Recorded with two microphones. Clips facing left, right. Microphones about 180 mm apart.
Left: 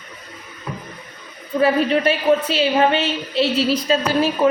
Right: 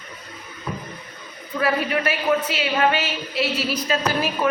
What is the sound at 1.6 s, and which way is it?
A woman's voice, 30° left (ahead or behind).